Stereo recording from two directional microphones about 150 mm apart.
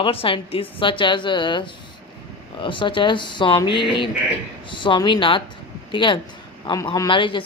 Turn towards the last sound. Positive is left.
turn(degrees=35)  # may be behind; listen again after turning